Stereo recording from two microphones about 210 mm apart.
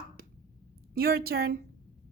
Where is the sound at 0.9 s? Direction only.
45° right (ahead or behind).